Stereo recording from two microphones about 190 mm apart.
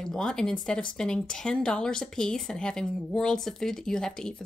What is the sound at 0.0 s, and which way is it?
Speech, 5° left (ahead or behind).